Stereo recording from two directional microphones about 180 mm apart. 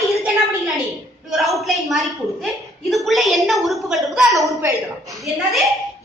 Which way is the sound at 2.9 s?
Centre (ahead or behind).